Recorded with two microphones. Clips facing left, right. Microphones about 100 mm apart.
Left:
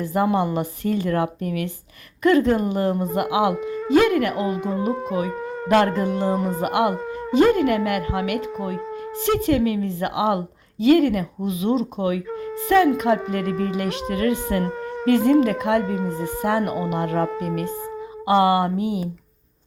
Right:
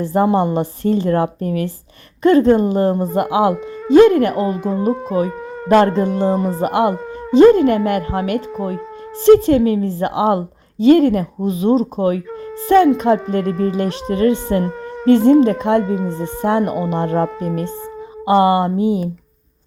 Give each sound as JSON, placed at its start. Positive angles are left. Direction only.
{"t": 0.0, "sound": "a woman's voice", "side_deg": -30}
{"t": 4.4, "sound": "speech", "side_deg": 0}
{"t": 5.1, "sound": "speech", "side_deg": -35}
{"t": 6.3, "sound": "speech", "side_deg": 0}
{"t": 6.6, "sound": "a woman's voice", "side_deg": -30}
{"t": 16.0, "sound": "speech", "side_deg": 5}
{"t": 16.4, "sound": "speech", "side_deg": -30}